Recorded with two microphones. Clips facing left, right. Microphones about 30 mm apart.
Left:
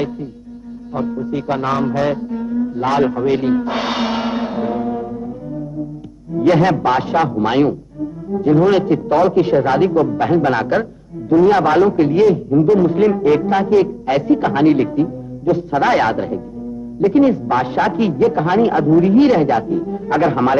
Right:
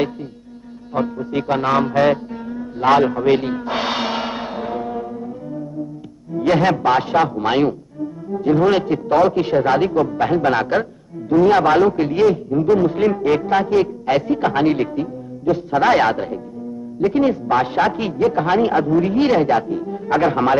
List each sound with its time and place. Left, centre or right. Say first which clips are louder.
0.0 s a man's voice: even; right
3.3 s music: left 1 dB; centre
6.4 s a man's voice: left 2 dB; centre
10.6 s a sound: left 1 dB; centre
11.4 s a man's voice: even; centre
15.0 s music: left 6 dB; right
15.7 s a man's voice: right 1 dB; centre
19.7 s speech: left 4 dB; right
20.1 s a man's voice: left 1 dB; centre